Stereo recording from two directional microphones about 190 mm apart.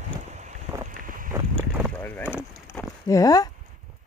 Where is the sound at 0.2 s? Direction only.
40° right (ahead or behind).